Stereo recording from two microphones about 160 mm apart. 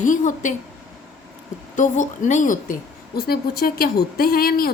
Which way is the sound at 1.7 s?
50° left (ahead or behind).